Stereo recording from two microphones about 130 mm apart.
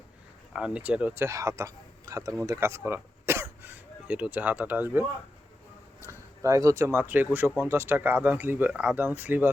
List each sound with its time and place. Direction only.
0.5 s speech: 10° right (ahead or behind)
6.1 s speech: 25° right (ahead or behind)